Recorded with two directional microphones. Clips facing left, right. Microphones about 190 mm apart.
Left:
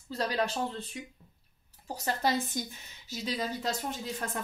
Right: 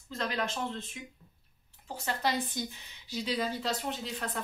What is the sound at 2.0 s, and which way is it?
A woman's voice, 45° left (ahead or behind).